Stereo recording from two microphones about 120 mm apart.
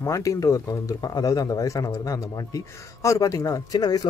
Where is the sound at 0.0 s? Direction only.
25° left (ahead or behind).